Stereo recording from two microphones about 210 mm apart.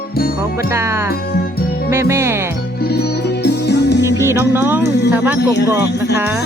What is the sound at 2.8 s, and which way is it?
Music, 50° left (ahead or behind).